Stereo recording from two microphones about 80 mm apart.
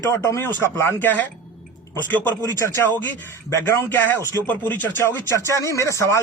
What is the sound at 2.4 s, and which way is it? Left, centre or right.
A man's voice, left.